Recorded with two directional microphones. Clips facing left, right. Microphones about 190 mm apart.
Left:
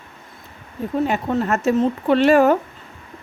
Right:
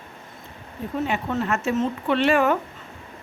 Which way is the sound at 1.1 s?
40° left (ahead or behind).